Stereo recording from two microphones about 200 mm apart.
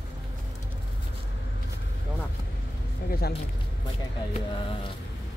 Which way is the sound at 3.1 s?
50° left (ahead or behind).